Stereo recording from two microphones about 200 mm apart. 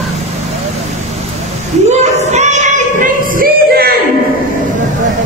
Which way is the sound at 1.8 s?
35° right (ahead or behind).